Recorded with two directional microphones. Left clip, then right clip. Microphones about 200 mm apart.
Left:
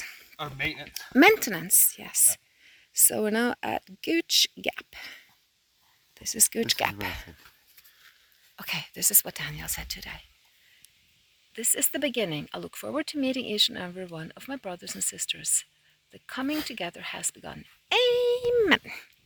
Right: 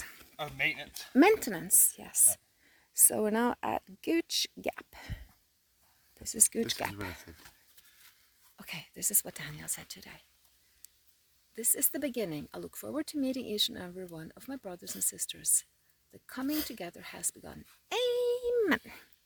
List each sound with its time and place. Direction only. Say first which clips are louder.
0.0 s a sound: left 7 dB; 25° right (ahead or behind)
0.3 s a woman's voice: left 1 dB; 5° right (ahead or behind)
6.2 s speech: left 6 dB; 10° right (ahead or behind)
8.5 s a woman's voice: left 11 dB; centre (ahead or behind)
11.5 s a woman's voice: left 6 dB; 5° right (ahead or behind)